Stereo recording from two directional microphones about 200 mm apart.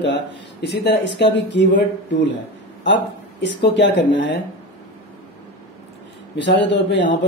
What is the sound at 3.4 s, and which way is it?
Speech, 60° left (ahead or behind).